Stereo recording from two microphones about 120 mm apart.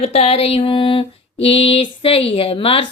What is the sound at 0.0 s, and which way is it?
A woman's voice, 55° left (ahead or behind).